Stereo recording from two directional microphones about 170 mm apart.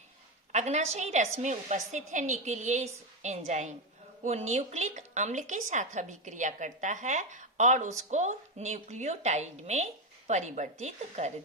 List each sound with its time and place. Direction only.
0.5 s a woman's voice: 40° right (ahead or behind)